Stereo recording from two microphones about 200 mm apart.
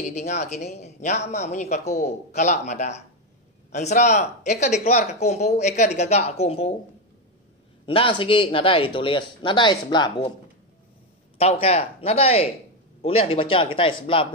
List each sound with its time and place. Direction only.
0.1 s speech: 35° left (ahead or behind)
7.8 s speech: 25° left (ahead or behind)
11.3 s speech: 30° left (ahead or behind)